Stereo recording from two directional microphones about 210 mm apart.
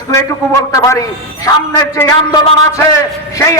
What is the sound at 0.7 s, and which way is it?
A man's voice, 15° left (ahead or behind).